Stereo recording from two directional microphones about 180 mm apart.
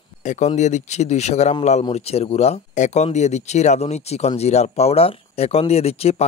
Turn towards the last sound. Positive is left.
turn(degrees=35)  # may be behind; listen again after turning